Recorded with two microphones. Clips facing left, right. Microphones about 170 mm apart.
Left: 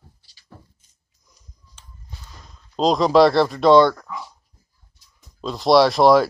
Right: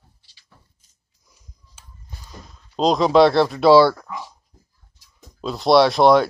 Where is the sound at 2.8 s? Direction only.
Centre (ahead or behind).